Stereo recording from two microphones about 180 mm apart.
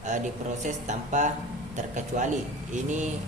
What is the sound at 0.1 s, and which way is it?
Speech, 45° right (ahead or behind).